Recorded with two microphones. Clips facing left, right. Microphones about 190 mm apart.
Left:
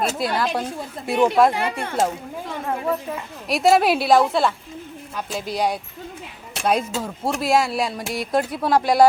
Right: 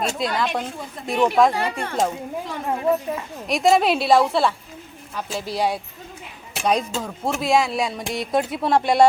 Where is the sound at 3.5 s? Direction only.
5° left (ahead or behind).